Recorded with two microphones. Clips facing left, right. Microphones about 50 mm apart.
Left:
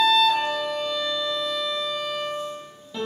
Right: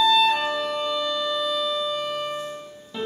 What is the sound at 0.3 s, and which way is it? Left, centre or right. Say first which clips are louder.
Music: even; centre.